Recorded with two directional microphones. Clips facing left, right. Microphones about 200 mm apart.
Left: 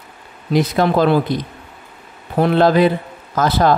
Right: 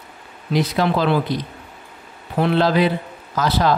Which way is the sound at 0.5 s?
50° left (ahead or behind).